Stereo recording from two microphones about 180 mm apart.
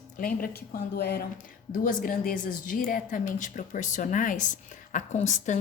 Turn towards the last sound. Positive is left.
turn(degrees=40)  # may be behind; listen again after turning